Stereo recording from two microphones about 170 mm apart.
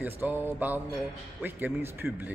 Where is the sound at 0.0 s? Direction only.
10° right (ahead or behind).